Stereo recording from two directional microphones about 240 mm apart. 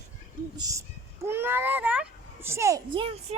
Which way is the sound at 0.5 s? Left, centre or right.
Centre.